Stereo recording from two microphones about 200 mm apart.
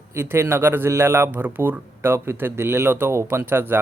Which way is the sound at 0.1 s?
10° right (ahead or behind).